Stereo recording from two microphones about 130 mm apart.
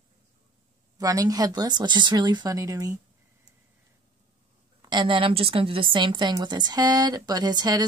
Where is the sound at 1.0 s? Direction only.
25° right (ahead or behind).